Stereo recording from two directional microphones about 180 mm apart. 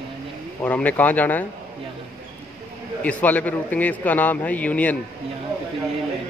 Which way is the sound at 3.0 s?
10° left (ahead or behind).